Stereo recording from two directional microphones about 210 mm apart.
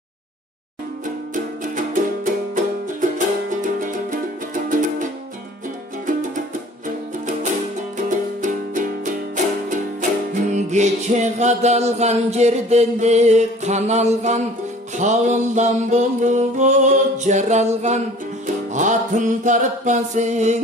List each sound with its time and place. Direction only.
1.3 s music: 40° right (ahead or behind)
8.4 s music: 35° right (ahead or behind)
10.3 s music: 35° right (ahead or behind)